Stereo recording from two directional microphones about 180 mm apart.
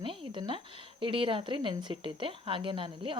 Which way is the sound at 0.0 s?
30° right (ahead or behind).